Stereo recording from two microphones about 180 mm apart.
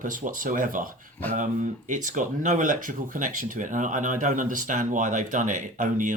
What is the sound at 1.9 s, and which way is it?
Speech, 45° right (ahead or behind).